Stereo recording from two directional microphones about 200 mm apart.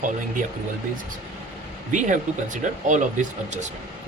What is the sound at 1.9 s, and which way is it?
Speech, 40° right (ahead or behind).